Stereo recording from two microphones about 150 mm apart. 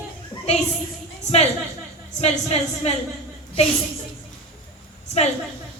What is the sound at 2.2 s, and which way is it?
Speech, 45° left (ahead or behind).